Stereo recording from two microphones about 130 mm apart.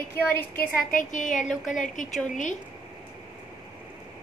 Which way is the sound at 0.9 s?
85° left.